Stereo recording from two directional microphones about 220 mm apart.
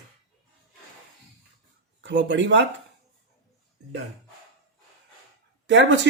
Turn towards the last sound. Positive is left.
turn(degrees=-55)  # may be behind; listen again after turning